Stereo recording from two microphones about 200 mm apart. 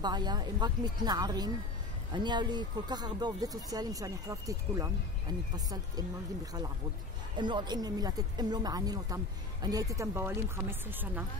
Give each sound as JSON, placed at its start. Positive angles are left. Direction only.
{"t": 0.0, "sound": "speech", "side_deg": -20}
{"t": 7.3, "sound": "speech", "side_deg": -20}